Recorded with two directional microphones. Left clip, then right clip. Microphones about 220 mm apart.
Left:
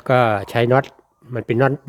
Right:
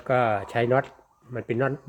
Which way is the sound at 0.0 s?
55° left (ahead or behind).